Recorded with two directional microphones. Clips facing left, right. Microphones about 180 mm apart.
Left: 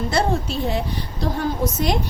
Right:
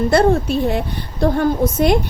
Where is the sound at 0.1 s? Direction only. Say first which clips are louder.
Right 7 dB; 55° right (ahead or behind).